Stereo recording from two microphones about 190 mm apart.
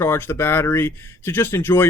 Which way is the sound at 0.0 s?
10° left (ahead or behind).